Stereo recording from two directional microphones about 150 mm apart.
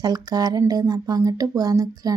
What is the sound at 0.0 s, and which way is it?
Speech, 25° right (ahead or behind).